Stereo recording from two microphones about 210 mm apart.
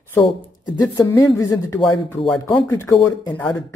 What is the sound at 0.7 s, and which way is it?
Speech, 15° left (ahead or behind).